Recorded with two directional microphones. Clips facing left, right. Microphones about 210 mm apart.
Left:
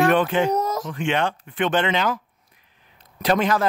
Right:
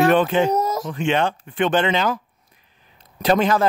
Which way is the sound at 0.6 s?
10° right (ahead or behind).